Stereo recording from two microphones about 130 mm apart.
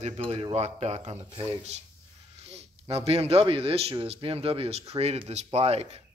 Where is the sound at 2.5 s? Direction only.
50° right (ahead or behind).